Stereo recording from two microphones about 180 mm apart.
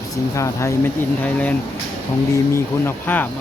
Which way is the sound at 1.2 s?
10° left (ahead or behind).